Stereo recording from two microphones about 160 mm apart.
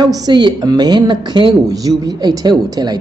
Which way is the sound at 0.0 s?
25° right (ahead or behind).